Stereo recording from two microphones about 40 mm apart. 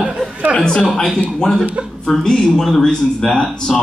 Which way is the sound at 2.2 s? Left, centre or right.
Centre.